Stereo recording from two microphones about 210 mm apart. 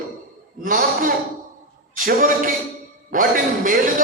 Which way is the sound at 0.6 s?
40° right (ahead or behind).